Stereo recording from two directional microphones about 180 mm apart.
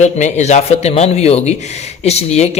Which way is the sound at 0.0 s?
40° left (ahead or behind).